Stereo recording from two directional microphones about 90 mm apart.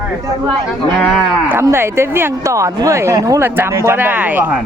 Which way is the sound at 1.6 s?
30° right (ahead or behind).